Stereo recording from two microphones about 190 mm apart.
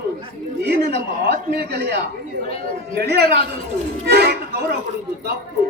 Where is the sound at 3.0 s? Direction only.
60° right (ahead or behind).